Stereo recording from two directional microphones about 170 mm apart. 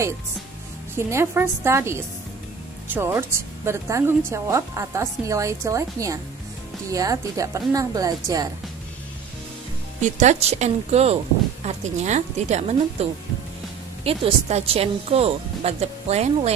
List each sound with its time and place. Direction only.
0.9 s a woman's voice: 15° right (ahead or behind)
10.0 s speech: 45° right (ahead or behind)